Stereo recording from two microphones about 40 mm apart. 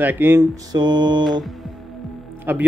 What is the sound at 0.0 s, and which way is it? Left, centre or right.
Speech, right.